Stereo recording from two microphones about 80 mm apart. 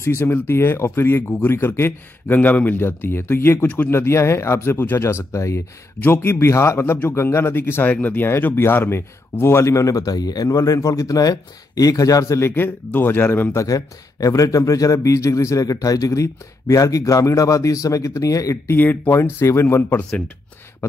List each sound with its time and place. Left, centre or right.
0.0 s speech: left
3.6 s speech: centre
3.9 s speech: left
13.6 s a man's voice: left
18.8 s speech: left
19.1 s speech: left